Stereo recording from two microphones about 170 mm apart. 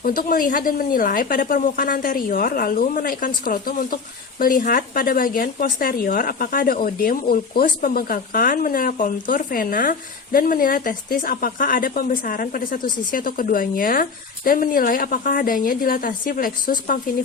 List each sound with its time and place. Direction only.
0.0 s speech: 55° left (ahead or behind)